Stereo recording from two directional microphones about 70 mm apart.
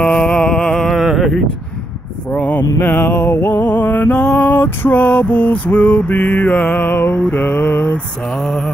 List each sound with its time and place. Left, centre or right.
0.0 s mantra: centre
1.0 s a sound: centre
2.3 s mantra: left
2.8 s music: left
7.2 s mantra: left
8.4 s a sound: centre